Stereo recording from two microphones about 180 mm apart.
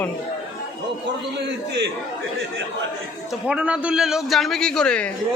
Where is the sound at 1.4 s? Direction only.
70° right (ahead or behind).